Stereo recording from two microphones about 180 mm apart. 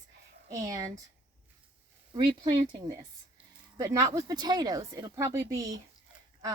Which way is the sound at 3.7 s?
20° right (ahead or behind).